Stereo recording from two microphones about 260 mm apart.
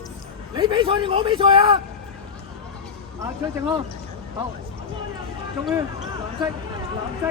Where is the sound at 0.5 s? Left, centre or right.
Centre.